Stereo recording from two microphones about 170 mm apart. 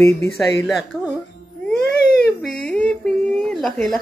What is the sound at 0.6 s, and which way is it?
Speech, centre (ahead or behind).